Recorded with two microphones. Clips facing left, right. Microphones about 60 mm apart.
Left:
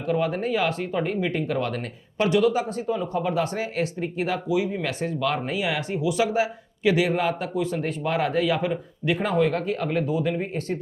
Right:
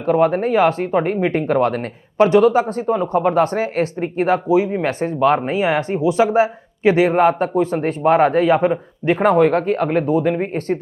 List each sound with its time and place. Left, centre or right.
0.0 s speech: right